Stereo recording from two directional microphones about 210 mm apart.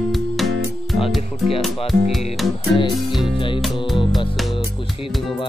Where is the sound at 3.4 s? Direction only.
25° left (ahead or behind).